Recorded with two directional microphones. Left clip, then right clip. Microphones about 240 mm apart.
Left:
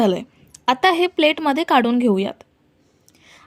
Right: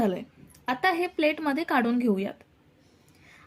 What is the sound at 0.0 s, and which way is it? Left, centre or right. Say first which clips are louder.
A woman's voice: left 9 dB; left.